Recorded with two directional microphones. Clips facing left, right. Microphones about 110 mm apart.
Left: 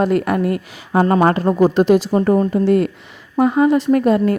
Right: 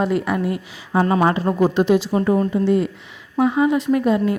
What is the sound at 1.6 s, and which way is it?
Speech, 45° left (ahead or behind).